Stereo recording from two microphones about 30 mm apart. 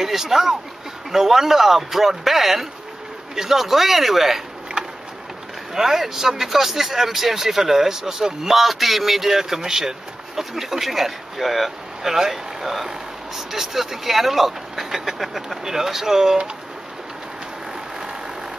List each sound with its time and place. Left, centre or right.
0.0 s a man's voice: centre
4.8 s a sound: right
5.8 s a man's voice: centre
8.5 s a man's voice: centre